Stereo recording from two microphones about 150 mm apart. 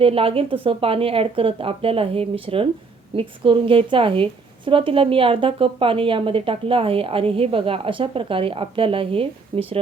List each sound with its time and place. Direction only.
0.0 s a woman's voice: 40° right (ahead or behind)